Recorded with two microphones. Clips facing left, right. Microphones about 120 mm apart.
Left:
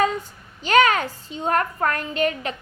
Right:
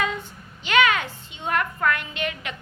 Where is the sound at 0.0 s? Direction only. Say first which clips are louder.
Left 6 dB; 40° left (ahead or behind).